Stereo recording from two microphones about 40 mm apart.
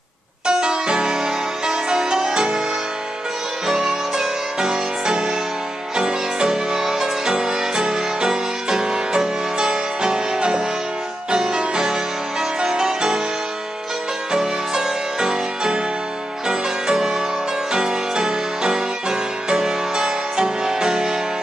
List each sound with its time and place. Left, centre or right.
0.5 s music: right
3.6 s music: centre
14.3 s music: centre